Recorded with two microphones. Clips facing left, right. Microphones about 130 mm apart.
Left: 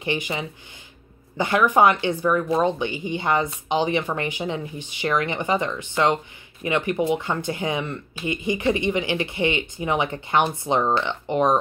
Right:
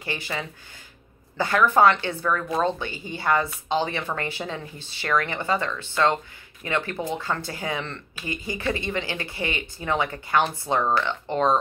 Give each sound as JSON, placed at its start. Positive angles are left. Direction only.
{"t": 0.0, "sound": "speech", "side_deg": 20}